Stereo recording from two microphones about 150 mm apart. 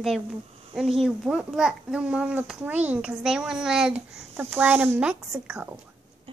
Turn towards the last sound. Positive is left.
turn(degrees=-5)  # may be behind; listen again after turning